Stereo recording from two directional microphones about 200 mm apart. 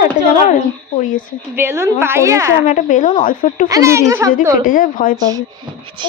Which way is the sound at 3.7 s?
15° right (ahead or behind).